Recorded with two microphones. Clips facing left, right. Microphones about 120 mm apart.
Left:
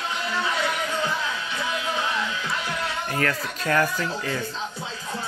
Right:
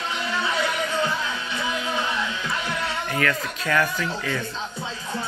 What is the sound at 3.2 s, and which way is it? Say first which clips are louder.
Speech: right 1 dB; 35° left (ahead or behind).